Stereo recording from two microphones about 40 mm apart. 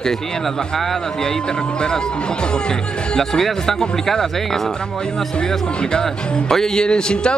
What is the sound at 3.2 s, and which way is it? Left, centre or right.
Speech, centre.